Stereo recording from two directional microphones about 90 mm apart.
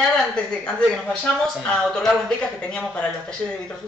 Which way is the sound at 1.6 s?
10° left (ahead or behind).